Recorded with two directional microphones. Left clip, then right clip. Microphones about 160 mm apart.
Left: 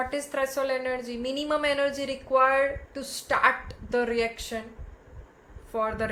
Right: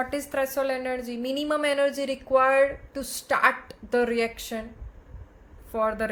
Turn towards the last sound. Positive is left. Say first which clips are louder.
# right 2 dB
turn(degrees=-30)  # may be behind; listen again after turning